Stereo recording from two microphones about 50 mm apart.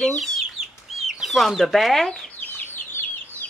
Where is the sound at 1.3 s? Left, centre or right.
Centre.